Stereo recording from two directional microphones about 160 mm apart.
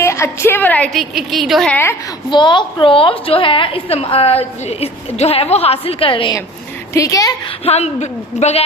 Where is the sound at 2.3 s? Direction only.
30° left (ahead or behind).